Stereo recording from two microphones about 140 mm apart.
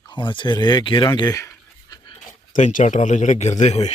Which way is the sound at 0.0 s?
35° left (ahead or behind).